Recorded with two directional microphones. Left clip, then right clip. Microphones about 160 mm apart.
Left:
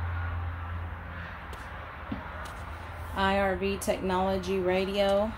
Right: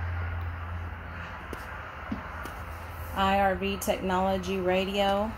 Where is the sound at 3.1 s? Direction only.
5° left (ahead or behind).